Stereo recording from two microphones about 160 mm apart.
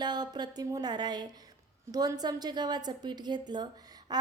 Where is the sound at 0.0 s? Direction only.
25° right (ahead or behind).